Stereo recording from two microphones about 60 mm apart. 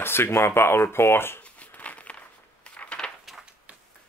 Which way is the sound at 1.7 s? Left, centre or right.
Left.